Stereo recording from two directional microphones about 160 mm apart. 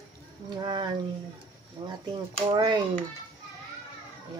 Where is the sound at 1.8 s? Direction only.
30° right (ahead or behind).